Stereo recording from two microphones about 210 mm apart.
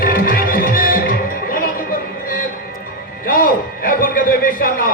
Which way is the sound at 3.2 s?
45° left (ahead or behind).